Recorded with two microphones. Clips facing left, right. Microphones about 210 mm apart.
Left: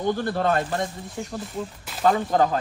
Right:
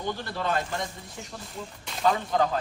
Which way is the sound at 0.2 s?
50° left (ahead or behind).